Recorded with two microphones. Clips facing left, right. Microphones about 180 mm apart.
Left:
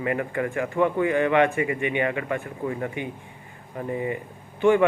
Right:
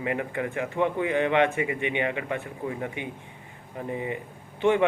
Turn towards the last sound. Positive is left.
turn(degrees=-20)  # may be behind; listen again after turning